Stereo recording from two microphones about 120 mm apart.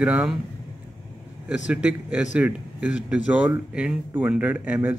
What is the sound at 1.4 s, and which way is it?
Speech, 10° right (ahead or behind).